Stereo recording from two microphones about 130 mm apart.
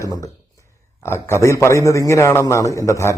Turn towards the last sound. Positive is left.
turn(degrees=20)  # may be behind; listen again after turning